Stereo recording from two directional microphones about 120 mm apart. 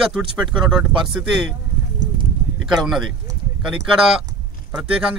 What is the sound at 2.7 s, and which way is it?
Speech, 5° right (ahead or behind).